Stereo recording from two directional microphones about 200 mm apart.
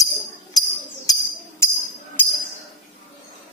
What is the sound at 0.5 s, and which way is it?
Music, 20° left (ahead or behind).